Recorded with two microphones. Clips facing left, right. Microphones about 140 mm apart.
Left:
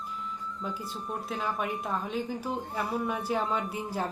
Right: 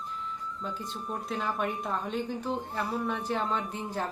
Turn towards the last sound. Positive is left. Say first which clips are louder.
# left 1 dB
turn(degrees=10)  # may be behind; listen again after turning